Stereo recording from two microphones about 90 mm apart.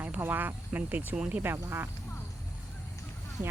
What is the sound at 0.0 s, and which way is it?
Speech, 25° right (ahead or behind).